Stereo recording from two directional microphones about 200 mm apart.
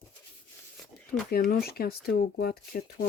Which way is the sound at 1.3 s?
50° left (ahead or behind).